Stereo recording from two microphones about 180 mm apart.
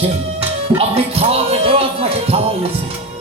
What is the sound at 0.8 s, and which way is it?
Speech, 35° right (ahead or behind).